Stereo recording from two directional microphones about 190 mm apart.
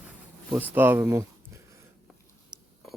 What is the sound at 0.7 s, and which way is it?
Speech, 10° right (ahead or behind).